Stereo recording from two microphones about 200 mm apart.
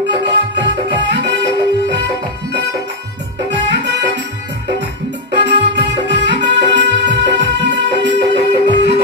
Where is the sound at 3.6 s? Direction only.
60° right (ahead or behind).